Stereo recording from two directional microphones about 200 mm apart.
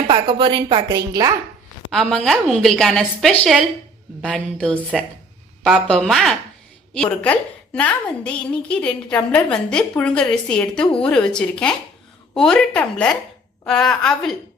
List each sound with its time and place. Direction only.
0.1 s a woman's voice: 25° right (ahead or behind)
1.9 s a woman's voice: centre (ahead or behind)